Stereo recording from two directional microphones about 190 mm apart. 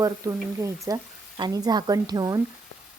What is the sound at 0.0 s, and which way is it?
A woman's voice, 15° right (ahead or behind).